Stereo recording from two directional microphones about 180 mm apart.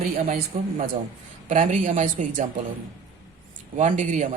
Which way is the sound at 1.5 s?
45° right (ahead or behind).